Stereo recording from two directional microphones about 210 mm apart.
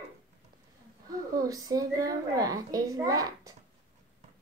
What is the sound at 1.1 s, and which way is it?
A woman's voice, 15° right (ahead or behind).